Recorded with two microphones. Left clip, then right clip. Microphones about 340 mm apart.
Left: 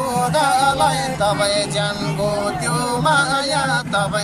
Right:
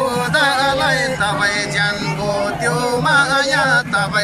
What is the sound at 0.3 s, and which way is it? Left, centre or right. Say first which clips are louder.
Music: right 1 dB; centre.